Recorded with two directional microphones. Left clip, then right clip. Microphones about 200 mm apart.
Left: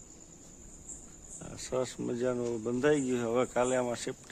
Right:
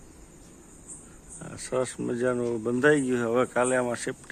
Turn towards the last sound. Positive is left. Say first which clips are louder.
# right 5 dB
turn(degrees=5)  # may be behind; listen again after turning